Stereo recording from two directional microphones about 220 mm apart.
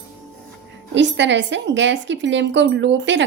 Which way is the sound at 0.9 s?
55° right (ahead or behind).